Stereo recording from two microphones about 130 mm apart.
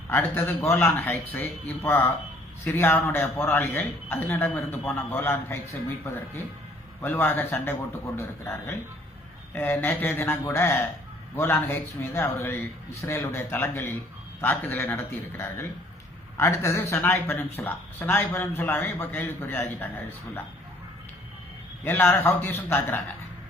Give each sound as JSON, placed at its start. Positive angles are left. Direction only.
{"t": 0.1, "sound": "speech", "side_deg": 15}
{"t": 21.8, "sound": "speech", "side_deg": 20}